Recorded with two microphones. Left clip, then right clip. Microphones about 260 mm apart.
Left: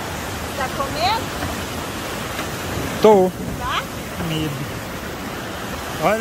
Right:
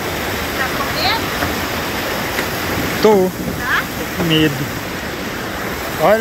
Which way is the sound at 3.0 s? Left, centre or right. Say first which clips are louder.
Even; centre.